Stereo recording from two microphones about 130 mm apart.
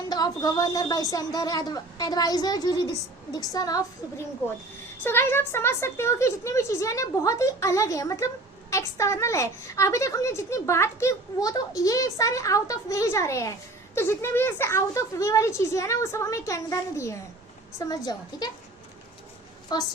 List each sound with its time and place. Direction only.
0.1 s a woman's voice: 30° left (ahead or behind)
5.0 s a woman's voice: 15° left (ahead or behind)
19.7 s a woman's voice: 30° left (ahead or behind)